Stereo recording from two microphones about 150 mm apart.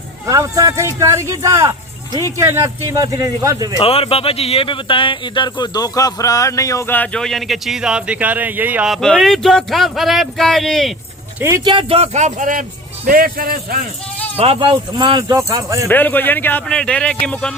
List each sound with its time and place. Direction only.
0.3 s speech: 20° right (ahead or behind)
3.8 s speech: 40° left (ahead or behind); by 10.9 s centre (ahead or behind)
11.3 s speech: 15° right (ahead or behind)
11.6 s speech: 35° right (ahead or behind); by 12.6 s 60° right (ahead or behind)
13.1 s a man's voice: 75° right (ahead or behind)
14.3 s speech: 40° right (ahead or behind); by 15.9 s 20° right (ahead or behind)
15.9 s a man's voice: 10° left (ahead or behind)